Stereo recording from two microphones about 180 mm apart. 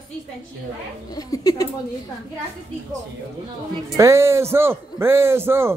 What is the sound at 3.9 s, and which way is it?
A man's voice, 15° right (ahead or behind).